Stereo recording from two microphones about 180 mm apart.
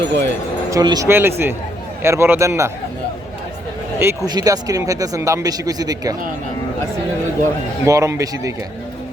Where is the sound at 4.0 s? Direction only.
15° right (ahead or behind).